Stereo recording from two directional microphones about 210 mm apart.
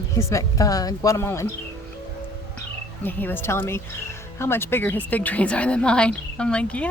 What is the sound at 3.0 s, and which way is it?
Speech, 10° left (ahead or behind).